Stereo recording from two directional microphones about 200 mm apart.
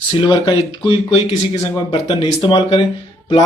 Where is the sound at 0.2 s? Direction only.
20° left (ahead or behind).